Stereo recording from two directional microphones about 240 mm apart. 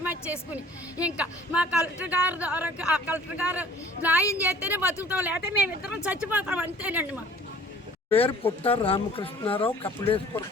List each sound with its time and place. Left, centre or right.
0.0 s a woman's voice: centre
8.1 s speech: left